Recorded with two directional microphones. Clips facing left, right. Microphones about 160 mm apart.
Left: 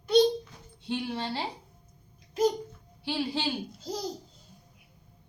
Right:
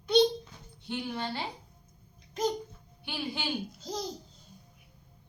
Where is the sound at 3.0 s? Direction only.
30° left (ahead or behind).